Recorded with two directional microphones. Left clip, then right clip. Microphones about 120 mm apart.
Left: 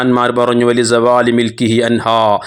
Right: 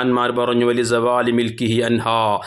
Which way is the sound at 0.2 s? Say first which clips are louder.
Left 6 dB; 45° left (ahead or behind).